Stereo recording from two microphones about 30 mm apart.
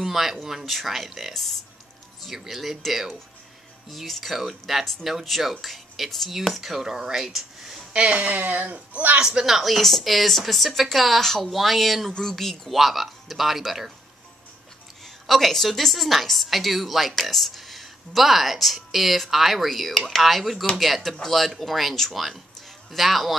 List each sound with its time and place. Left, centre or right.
0.0 s speech: centre
1.3 s speech: centre
2.3 s a woman's voice: centre
8.1 s speech: right
8.6 s a child's voice: right
9.2 s speech: right
9.5 s a woman's voice: centre
11.1 s a woman's voice: centre
12.2 s speech: centre
12.7 s speech: centre
15.2 s a woman's voice: centre
19.7 s a woman's voice: centre